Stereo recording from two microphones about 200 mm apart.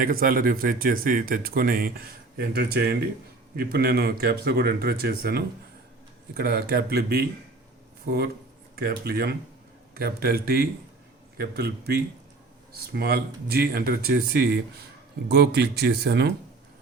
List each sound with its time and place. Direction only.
0.0 s speech: 45° right (ahead or behind)